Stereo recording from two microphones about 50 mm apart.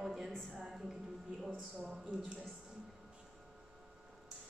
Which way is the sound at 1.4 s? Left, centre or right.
Centre.